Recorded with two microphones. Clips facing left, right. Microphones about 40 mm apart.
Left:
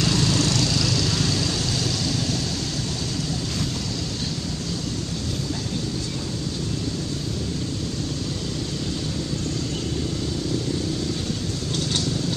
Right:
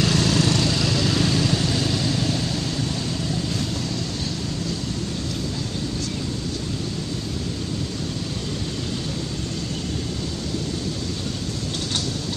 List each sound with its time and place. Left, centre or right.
0.0 s vehicle: centre